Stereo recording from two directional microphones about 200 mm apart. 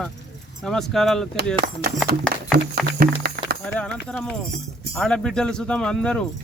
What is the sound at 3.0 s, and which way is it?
Music, 50° right (ahead or behind).